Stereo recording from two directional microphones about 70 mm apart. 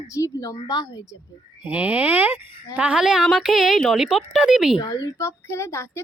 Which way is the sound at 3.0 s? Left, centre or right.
Centre.